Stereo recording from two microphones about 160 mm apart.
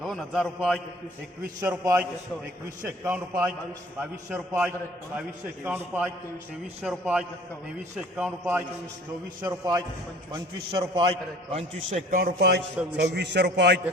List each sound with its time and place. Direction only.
0.0 s a man's voice: centre (ahead or behind)
1.6 s a man's voice: 20° right (ahead or behind)
9.4 s a man's voice: 20° right (ahead or behind); by 12.0 s 40° right (ahead or behind)
12.1 s a man's voice: 80° right